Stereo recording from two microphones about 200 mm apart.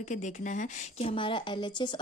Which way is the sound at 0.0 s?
35° left (ahead or behind).